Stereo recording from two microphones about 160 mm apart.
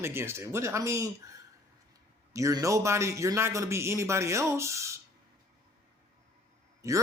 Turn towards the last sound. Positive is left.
turn(degrees=-20)  # may be behind; listen again after turning